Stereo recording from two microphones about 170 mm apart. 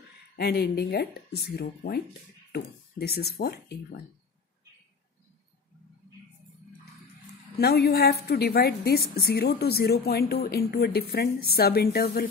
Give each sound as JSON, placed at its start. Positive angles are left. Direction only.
{"t": 0.4, "sound": "a woman's voice", "side_deg": 70}
{"t": 7.5, "sound": "a woman's voice", "side_deg": 70}